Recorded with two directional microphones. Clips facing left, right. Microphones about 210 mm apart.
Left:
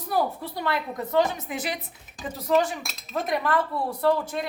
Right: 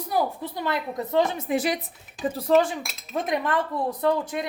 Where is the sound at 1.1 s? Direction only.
35° right (ahead or behind).